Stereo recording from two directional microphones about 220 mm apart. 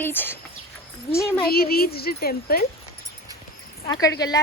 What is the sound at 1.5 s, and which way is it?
Speech, 45° left (ahead or behind).